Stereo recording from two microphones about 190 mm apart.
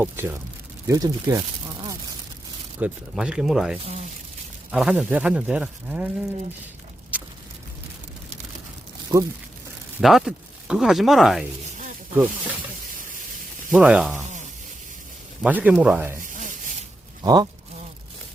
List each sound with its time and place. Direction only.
0.0 s speech: 10° right (ahead or behind)
2.8 s speech: 5° right (ahead or behind)
7.1 s a sound: 10° right (ahead or behind)
9.1 s speech: 20° right (ahead or behind)
10.0 s speech: centre (ahead or behind)
13.7 s speech: 5° right (ahead or behind)
15.4 s speech: 10° right (ahead or behind)
17.2 s speech: 20° right (ahead or behind)